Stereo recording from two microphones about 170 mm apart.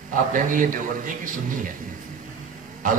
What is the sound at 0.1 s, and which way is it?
A man's voice, 50° right (ahead or behind).